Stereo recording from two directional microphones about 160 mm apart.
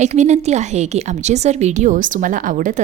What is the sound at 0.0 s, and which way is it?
A woman's voice, 45° right (ahead or behind).